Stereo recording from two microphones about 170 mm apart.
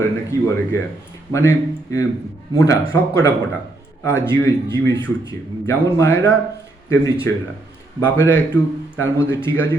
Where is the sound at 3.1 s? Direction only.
15° left (ahead or behind).